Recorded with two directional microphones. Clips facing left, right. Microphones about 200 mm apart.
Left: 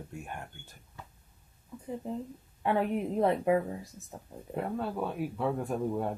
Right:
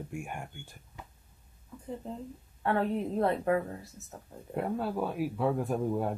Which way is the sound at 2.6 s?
15° left (ahead or behind).